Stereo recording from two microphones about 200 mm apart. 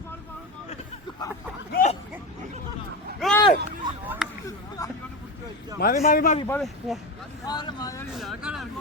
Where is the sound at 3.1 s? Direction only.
Centre (ahead or behind).